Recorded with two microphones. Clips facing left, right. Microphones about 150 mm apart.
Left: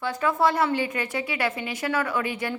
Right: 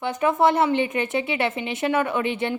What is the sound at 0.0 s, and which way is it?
A woman's voice, 20° right (ahead or behind).